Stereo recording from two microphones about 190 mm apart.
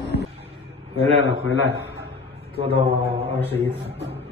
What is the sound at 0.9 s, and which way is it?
Speech, 30° right (ahead or behind).